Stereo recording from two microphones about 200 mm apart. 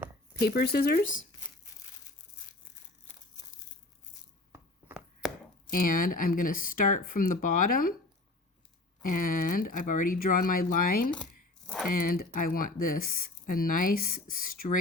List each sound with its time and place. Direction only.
0.3 s speech: 55° left (ahead or behind)
4.5 s a sound: 10° right (ahead or behind)
5.7 s speech: 45° left (ahead or behind)
9.0 s speech: 45° left (ahead or behind)
11.6 s typing: centre (ahead or behind)
11.9 s speech: 45° left (ahead or behind)